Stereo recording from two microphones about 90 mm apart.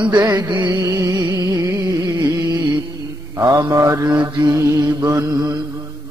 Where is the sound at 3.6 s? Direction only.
35° right (ahead or behind).